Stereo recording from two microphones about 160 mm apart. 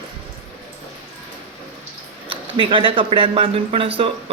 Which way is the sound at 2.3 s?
35° right (ahead or behind).